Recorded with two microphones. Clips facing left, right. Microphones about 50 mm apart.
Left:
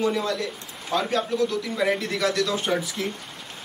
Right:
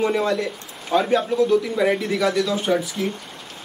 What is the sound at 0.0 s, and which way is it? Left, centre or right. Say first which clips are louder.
A man's voice: right 4 dB; right.